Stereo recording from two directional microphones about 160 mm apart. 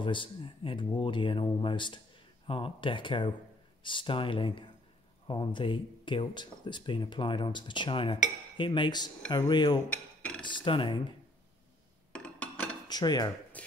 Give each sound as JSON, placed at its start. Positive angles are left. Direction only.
{"t": 0.0, "sound": "speech", "side_deg": 30}
{"t": 12.1, "sound": "a sound", "side_deg": 5}
{"t": 12.8, "sound": "cutlery", "side_deg": 25}
{"t": 13.6, "sound": "speech", "side_deg": 10}